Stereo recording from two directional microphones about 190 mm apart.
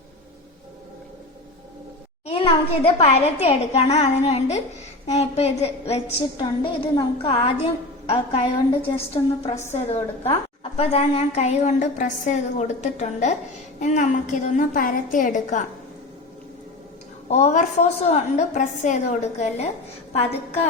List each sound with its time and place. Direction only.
2.2 s a woman's voice: 30° left (ahead or behind)
17.2 s a woman's voice: 35° left (ahead or behind)